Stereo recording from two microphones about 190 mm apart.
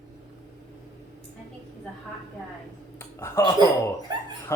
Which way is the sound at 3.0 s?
15° left (ahead or behind).